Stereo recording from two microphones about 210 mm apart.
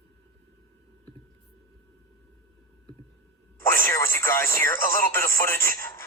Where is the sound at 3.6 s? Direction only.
10° left (ahead or behind).